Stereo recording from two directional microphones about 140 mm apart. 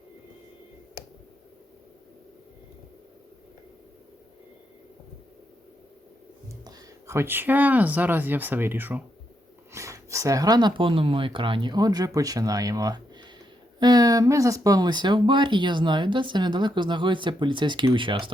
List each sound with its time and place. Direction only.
6.7 s speech: 20° right (ahead or behind); by 18.3 s 35° right (ahead or behind)